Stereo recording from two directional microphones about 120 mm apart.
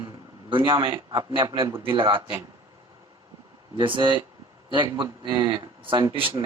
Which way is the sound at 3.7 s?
45° right (ahead or behind).